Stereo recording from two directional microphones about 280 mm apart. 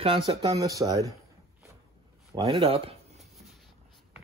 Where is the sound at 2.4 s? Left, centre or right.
Centre.